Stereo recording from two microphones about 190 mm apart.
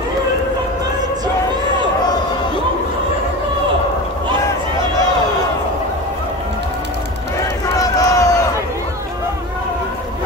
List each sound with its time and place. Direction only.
7.8 s crowd: 15° left (ahead or behind)